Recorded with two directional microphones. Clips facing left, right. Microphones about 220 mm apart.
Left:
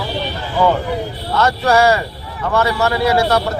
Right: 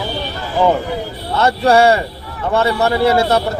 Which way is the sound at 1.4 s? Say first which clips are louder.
Right 2 dB; 30° right (ahead or behind).